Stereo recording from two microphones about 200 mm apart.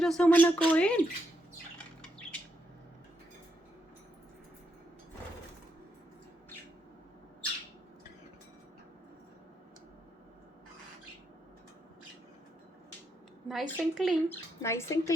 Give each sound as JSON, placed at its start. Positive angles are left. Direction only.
{"t": 0.0, "sound": "speech", "side_deg": 5}
{"t": 2.0, "sound": "bird", "side_deg": 5}
{"t": 13.5, "sound": "a woman's voice", "side_deg": 0}
{"t": 14.3, "sound": "speech", "side_deg": 15}